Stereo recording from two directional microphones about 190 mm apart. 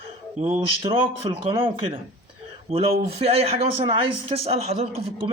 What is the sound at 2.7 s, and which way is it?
A man's voice, 30° right (ahead or behind).